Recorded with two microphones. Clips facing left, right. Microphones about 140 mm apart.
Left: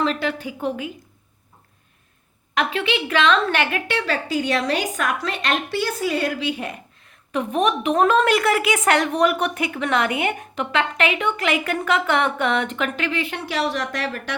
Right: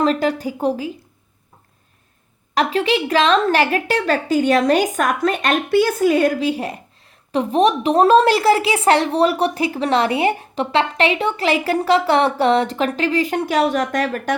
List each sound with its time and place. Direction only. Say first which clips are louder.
0.0 s a woman's voice: right 5 dB; 40° right (ahead or behind)
2.6 s a woman's voice: right 5 dB; 35° right (ahead or behind)